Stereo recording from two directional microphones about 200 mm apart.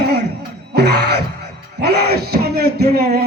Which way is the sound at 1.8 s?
55° right (ahead or behind).